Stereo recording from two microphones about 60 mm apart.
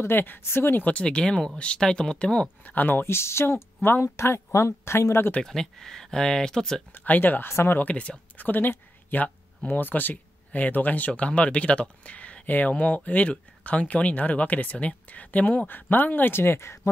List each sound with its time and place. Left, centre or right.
0.0 s speech: left
0.8 s speech: centre
2.4 s speech: left
5.4 s speech: centre
6.9 s speech: left
7.4 s speech: left
7.8 s speech: left